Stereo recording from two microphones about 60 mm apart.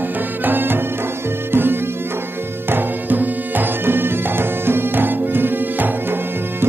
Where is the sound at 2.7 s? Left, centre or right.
Right.